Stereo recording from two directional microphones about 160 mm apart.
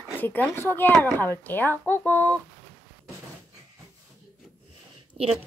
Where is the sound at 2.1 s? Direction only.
15° right (ahead or behind).